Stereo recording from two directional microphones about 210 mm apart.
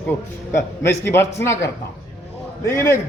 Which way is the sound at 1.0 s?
10° left (ahead or behind).